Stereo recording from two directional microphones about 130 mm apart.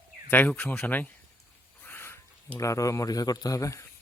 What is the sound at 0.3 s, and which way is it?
Speech, 15° left (ahead or behind).